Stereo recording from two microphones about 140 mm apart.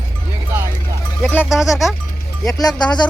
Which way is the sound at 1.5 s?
Centre (ahead or behind).